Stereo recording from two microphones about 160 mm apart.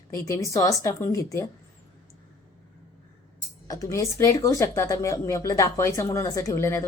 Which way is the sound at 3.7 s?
20° left (ahead or behind).